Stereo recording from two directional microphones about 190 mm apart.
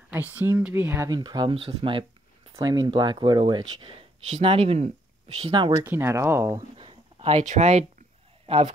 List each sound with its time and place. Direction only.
0.1 s speech: 10° right (ahead or behind)
4.3 s speech: 30° right (ahead or behind)
5.9 s speech: 15° right (ahead or behind)
6.8 s a sound: 30° right (ahead or behind)
8.5 s speech: 35° right (ahead or behind)